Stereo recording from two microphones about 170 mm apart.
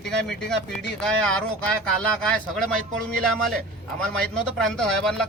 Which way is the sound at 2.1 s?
5° left (ahead or behind).